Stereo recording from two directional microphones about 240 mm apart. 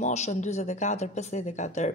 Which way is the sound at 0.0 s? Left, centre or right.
Left.